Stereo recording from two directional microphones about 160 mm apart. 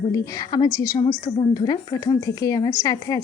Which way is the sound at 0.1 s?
25° left (ahead or behind).